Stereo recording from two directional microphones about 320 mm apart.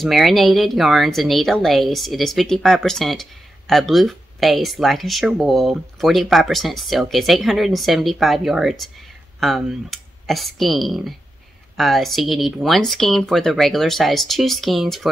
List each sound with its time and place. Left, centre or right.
0.0 s a woman's voice: centre